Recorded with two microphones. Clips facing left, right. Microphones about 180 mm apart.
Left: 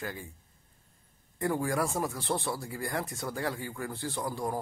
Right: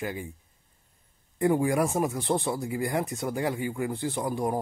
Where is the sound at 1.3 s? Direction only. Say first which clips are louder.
Right 6 dB; 20° right (ahead or behind).